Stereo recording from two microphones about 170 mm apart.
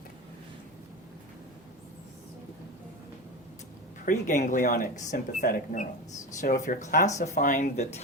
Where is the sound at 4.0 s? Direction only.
50° left (ahead or behind).